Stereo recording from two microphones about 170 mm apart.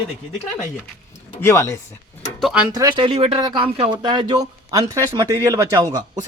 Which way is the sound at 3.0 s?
35° right (ahead or behind).